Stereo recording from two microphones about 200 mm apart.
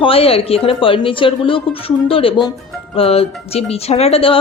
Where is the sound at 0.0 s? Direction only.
30° left (ahead or behind).